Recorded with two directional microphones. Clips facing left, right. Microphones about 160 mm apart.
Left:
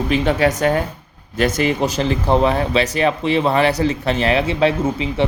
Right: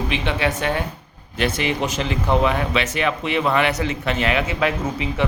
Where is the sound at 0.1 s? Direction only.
40° left (ahead or behind).